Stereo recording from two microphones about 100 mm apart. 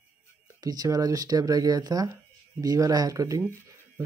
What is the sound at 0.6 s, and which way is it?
Speech, 40° right (ahead or behind).